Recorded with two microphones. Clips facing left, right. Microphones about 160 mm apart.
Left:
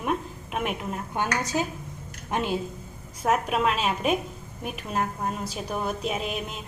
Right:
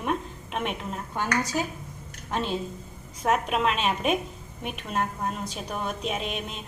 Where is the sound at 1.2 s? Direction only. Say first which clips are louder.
Even; 20° left (ahead or behind).